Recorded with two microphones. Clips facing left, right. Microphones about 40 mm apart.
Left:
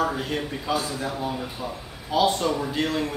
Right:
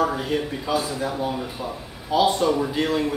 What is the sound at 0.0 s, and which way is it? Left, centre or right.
Speech, centre.